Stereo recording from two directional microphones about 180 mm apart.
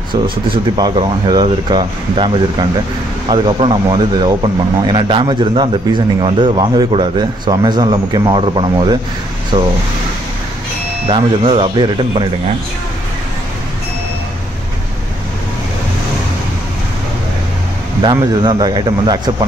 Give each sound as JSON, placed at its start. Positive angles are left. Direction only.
{"t": 0.7, "sound": "a man's voice", "side_deg": -25}
{"t": 11.1, "sound": "a man's voice", "side_deg": -30}
{"t": 18.0, "sound": "a man's voice", "side_deg": -20}